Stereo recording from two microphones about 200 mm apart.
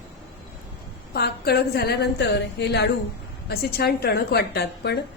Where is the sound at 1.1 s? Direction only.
50° left (ahead or behind).